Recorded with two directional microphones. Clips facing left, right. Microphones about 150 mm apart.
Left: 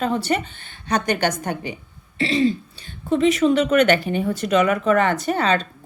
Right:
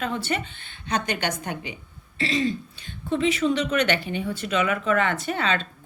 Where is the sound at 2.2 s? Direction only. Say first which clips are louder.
Left 5 dB; 30° left (ahead or behind).